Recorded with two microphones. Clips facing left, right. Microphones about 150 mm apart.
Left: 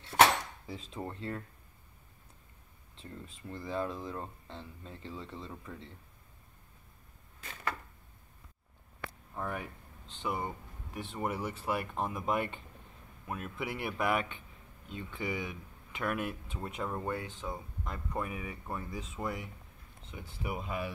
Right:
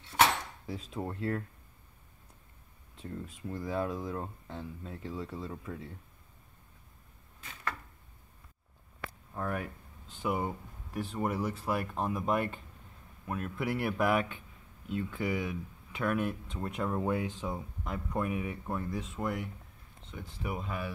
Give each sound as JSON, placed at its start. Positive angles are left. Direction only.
{"t": 0.1, "sound": "cutlery", "side_deg": 65}
{"t": 0.7, "sound": "speech", "side_deg": -5}
{"t": 3.0, "sound": "speech", "side_deg": -5}
{"t": 9.3, "sound": "speech", "side_deg": 0}